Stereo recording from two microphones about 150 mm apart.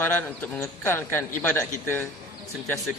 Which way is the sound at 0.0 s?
10° left (ahead or behind).